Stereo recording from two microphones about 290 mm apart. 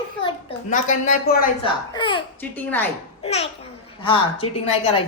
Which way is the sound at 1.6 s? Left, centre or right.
Centre.